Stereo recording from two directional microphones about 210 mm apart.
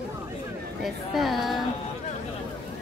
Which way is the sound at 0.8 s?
Centre (ahead or behind).